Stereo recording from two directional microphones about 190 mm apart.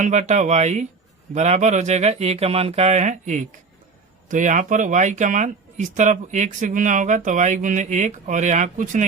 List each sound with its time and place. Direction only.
0.0 s speech: 40° right (ahead or behind)